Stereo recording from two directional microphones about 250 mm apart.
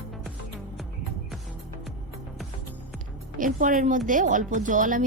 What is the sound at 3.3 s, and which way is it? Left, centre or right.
A woman's voice, right.